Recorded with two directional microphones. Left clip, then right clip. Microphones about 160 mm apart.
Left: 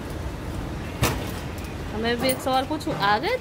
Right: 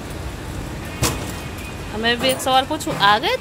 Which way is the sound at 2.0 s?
5° right (ahead or behind).